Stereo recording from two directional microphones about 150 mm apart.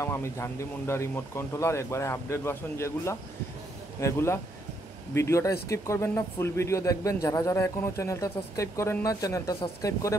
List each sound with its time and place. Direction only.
0.0 s speech: 20° left (ahead or behind)